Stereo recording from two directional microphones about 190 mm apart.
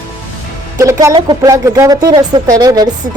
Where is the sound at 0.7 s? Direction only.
15° right (ahead or behind).